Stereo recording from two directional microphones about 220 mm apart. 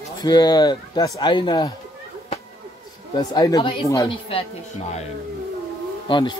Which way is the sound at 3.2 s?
15° left (ahead or behind).